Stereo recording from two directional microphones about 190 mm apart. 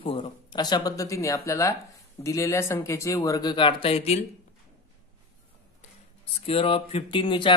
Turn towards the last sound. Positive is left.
turn(degrees=25)  # may be behind; listen again after turning